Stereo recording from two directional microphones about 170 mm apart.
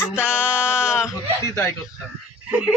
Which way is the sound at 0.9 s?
5° right (ahead or behind).